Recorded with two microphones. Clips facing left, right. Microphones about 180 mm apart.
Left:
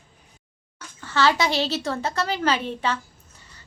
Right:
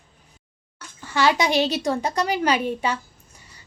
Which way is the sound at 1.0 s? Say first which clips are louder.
Right 1 dB; 15° right (ahead or behind).